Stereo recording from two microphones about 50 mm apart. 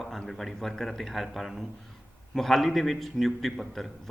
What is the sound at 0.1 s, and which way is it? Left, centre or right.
A man's voice, centre.